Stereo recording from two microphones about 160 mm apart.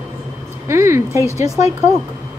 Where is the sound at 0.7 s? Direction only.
15° right (ahead or behind).